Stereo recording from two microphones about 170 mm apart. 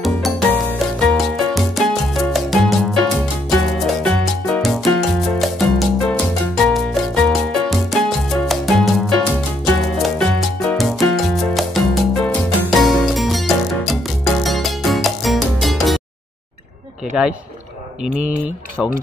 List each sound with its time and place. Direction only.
1.1 s music: centre (ahead or behind)
17.1 s speech: 5° right (ahead or behind)